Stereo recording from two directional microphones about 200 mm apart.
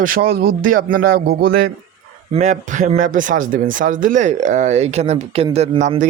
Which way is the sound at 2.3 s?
35° right (ahead or behind).